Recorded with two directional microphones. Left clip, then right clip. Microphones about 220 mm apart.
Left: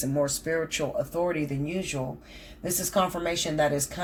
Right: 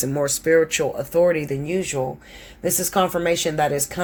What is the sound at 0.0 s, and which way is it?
Speech, 50° right (ahead or behind).